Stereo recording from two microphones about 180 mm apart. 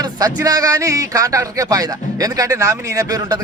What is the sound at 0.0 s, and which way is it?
A man's voice, 20° right (ahead or behind).